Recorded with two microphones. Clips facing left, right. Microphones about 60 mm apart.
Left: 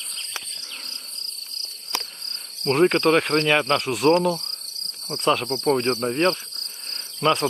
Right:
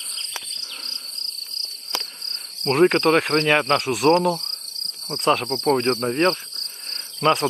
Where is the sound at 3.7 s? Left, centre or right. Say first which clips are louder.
Right 1 dB; centre.